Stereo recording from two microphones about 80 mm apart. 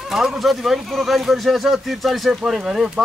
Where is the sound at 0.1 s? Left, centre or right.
Centre.